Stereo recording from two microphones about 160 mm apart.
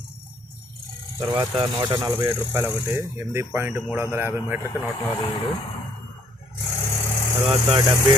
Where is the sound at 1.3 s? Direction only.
30° right (ahead or behind); by 4.9 s 15° right (ahead or behind).